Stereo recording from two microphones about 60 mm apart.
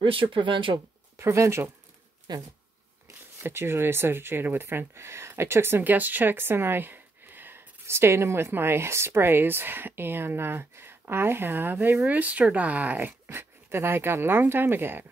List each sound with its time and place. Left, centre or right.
1.1 s speech: right
3.3 s speech: right
13.4 s speech: right